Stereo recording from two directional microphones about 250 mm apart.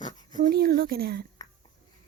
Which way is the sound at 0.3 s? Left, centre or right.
Right.